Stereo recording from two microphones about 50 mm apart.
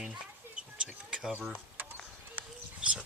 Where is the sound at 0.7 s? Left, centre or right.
Centre.